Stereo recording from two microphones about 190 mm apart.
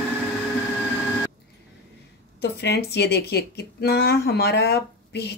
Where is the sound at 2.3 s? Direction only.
60° left (ahead or behind).